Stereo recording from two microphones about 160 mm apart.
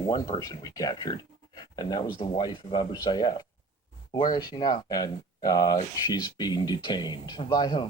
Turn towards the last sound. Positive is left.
turn(degrees=30)  # may be behind; listen again after turning